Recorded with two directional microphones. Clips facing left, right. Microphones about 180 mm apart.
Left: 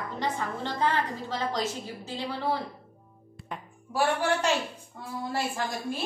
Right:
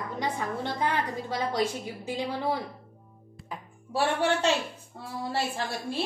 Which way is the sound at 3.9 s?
25° right (ahead or behind).